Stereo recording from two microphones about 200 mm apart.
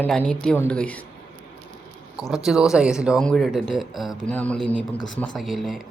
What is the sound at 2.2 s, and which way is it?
Speech, centre (ahead or behind).